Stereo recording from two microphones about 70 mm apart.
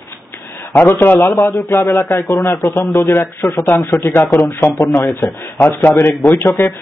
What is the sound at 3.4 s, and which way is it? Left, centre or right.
Speech, left.